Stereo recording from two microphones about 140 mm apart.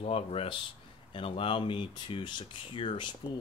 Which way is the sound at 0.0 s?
45° left (ahead or behind).